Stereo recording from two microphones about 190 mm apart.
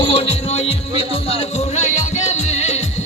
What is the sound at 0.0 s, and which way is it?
Music, 30° left (ahead or behind).